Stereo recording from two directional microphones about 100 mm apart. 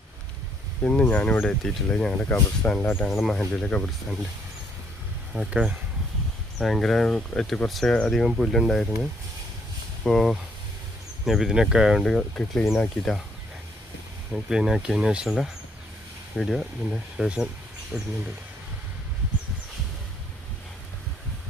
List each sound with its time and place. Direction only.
0.8 s speech: 15° left (ahead or behind)
2.8 s speech: 20° left (ahead or behind)
3.1 s speech: centre (ahead or behind)
5.3 s speech: 10° right (ahead or behind)
6.6 s speech: 5° left (ahead or behind)
14.3 s speech: 5° right (ahead or behind)